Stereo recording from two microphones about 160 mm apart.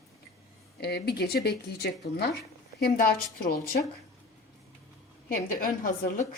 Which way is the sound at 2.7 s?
70° left (ahead or behind).